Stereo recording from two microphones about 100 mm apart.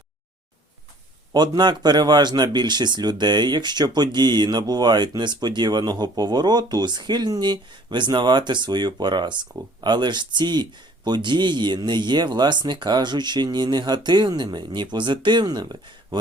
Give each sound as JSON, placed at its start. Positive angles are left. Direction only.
{"t": 1.3, "sound": "speech", "side_deg": -45}